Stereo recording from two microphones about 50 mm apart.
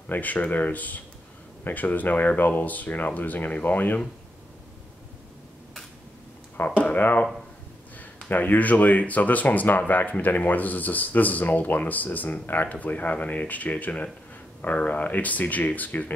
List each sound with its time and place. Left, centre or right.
0.1 s speech: left
6.8 s speech: left